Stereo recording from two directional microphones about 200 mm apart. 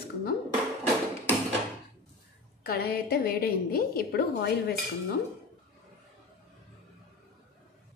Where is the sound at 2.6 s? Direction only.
50° left (ahead or behind).